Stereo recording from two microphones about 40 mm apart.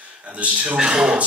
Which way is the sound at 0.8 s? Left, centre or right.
Right.